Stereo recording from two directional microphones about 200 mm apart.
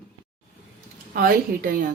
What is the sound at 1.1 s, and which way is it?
Speech, 45° right (ahead or behind).